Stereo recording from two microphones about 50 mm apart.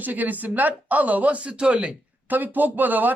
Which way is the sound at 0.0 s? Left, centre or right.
Right.